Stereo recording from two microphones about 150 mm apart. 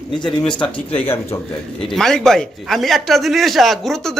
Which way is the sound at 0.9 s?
15° left (ahead or behind).